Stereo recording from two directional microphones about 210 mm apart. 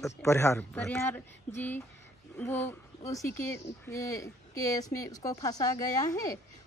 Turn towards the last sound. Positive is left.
turn(degrees=15)  # may be behind; listen again after turning